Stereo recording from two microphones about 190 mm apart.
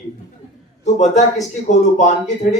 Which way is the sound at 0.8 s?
40° left (ahead or behind).